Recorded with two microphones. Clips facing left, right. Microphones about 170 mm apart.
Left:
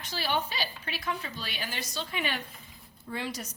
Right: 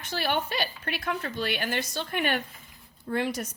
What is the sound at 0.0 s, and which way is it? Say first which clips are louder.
A woman's voice: right 3 dB; 55° right (ahead or behind).